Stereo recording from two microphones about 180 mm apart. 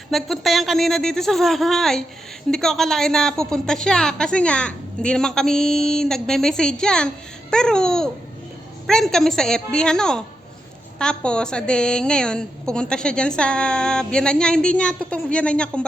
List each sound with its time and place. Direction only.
0.1 s a woman's voice: centre (ahead or behind)